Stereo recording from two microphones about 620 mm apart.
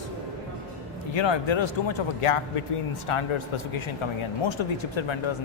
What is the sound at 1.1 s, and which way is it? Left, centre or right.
Speech, left.